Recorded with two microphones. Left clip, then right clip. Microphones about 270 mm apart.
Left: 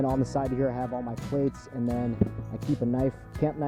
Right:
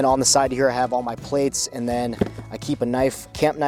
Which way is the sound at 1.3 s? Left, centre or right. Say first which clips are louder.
Right 7 dB; centre.